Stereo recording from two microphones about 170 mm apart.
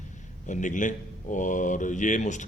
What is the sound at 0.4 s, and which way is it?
Speech, 50° left (ahead or behind).